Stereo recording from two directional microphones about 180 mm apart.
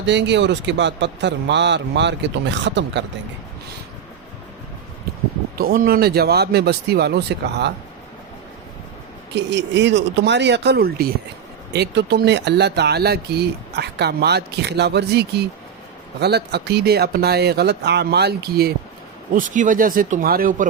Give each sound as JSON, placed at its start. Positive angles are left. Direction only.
{"t": 0.0, "sound": "speech", "side_deg": -80}
{"t": 5.5, "sound": "speech", "side_deg": -55}
{"t": 9.3, "sound": "speech", "side_deg": -75}
{"t": 19.3, "sound": "speech", "side_deg": -45}